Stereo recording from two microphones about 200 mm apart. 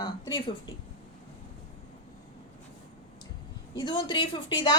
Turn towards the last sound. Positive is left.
turn(degrees=20)  # may be behind; listen again after turning